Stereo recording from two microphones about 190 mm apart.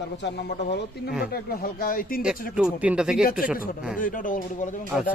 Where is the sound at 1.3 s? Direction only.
50° left (ahead or behind).